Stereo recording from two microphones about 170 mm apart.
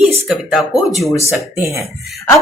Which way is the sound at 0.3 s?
Centre (ahead or behind).